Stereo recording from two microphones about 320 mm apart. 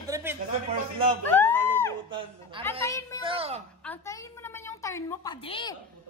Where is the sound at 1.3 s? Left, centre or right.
Centre.